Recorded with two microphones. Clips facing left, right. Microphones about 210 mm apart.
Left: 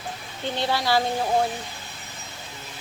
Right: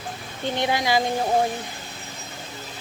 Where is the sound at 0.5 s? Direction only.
20° right (ahead or behind).